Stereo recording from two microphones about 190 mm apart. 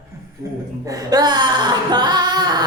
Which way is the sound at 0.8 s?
20° right (ahead or behind).